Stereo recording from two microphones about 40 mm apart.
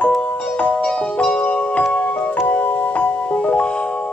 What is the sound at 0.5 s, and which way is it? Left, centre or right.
Music, left.